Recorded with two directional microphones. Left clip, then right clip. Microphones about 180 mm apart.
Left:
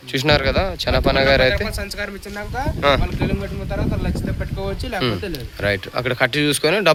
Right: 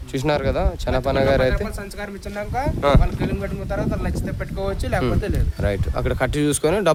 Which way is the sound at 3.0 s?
Centre (ahead or behind).